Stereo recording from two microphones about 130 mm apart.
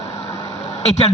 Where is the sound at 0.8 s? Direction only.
60° left (ahead or behind).